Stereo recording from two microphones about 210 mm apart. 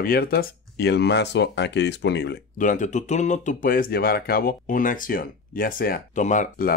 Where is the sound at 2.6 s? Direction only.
35° left (ahead or behind).